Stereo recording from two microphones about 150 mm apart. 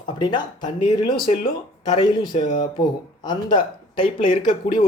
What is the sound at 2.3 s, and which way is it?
Speech, 55° left (ahead or behind).